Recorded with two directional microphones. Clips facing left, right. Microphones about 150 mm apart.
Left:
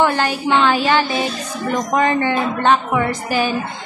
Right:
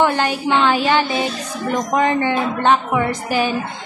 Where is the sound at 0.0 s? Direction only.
20° right (ahead or behind).